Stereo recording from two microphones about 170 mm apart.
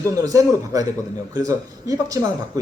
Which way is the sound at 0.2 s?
20° right (ahead or behind).